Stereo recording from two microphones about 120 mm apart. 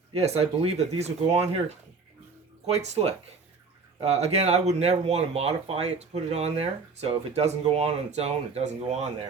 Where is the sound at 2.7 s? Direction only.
65° right (ahead or behind).